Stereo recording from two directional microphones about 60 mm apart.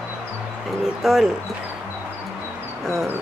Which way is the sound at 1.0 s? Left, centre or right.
Centre.